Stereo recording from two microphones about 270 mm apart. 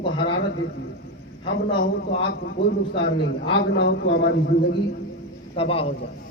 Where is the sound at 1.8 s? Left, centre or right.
Left.